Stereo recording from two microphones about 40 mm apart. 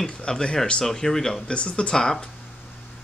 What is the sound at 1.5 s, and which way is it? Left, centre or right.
Speech, left.